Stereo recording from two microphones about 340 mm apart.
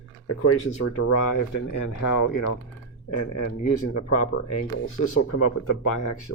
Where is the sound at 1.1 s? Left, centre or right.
Left.